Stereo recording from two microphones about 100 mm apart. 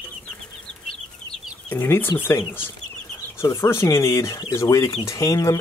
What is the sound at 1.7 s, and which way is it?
Speech, 20° left (ahead or behind).